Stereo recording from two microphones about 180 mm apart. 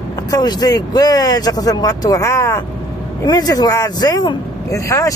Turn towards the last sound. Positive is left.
turn(degrees=20)  # may be behind; listen again after turning